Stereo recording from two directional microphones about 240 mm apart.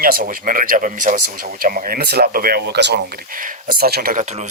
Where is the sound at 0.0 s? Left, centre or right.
Right.